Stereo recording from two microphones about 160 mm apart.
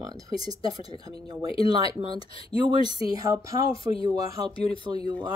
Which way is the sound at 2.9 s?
25° right (ahead or behind).